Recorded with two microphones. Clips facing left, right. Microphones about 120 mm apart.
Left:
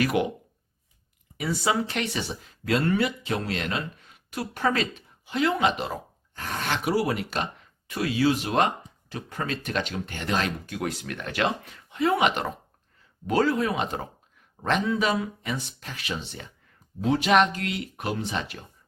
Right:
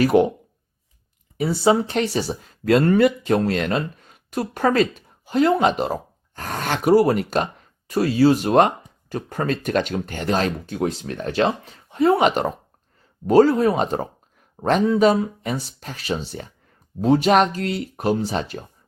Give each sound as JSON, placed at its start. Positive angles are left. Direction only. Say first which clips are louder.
{"t": 0.0, "sound": "speech", "louder": "right 8 dB", "side_deg": -35}
{"t": 1.4, "sound": "speech", "louder": "right 8 dB", "side_deg": -30}